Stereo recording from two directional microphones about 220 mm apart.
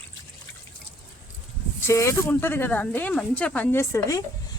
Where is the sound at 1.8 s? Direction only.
10° left (ahead or behind).